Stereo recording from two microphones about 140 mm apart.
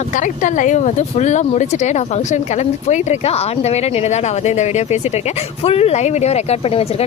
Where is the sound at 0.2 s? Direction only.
65° left (ahead or behind).